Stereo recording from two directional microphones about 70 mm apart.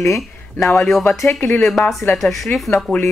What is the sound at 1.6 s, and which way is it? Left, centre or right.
Speech, centre.